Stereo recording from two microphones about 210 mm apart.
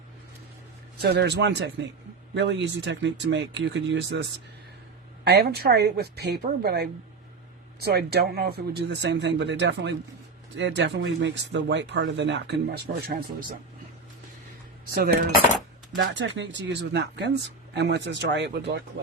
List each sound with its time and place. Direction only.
1.0 s a woman's voice: 50° right (ahead or behind)
14.8 s speech: 45° right (ahead or behind)
16.0 s speech: 60° right (ahead or behind)